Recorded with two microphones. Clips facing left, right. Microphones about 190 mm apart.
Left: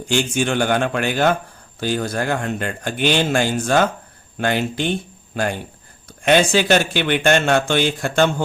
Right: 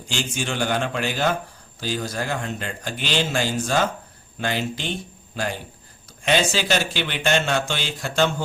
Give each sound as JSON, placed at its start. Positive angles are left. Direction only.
{"t": 0.1, "sound": "speech", "side_deg": 55}